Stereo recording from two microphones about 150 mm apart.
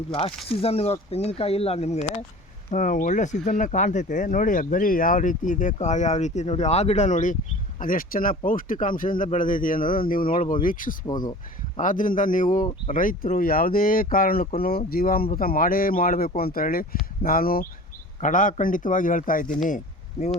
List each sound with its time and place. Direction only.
0.1 s speech: 35° left (ahead or behind)
2.7 s speech: 60° left (ahead or behind)
7.8 s speech: 70° left (ahead or behind)
18.2 s speech: 60° left (ahead or behind)